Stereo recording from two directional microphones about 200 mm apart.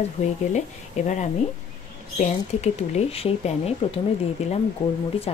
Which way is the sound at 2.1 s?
35° left (ahead or behind).